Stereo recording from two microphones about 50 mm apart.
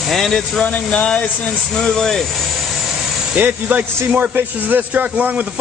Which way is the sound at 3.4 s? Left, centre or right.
Right.